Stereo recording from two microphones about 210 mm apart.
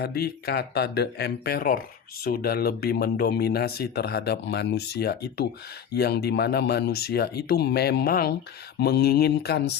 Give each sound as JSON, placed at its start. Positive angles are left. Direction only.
{"t": 0.0, "sound": "speech", "side_deg": 50}